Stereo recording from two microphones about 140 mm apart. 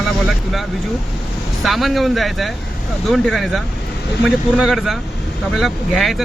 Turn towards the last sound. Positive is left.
turn(degrees=0)  # may be behind; listen again after turning